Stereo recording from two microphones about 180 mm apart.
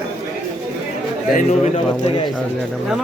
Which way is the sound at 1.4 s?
40° left (ahead or behind).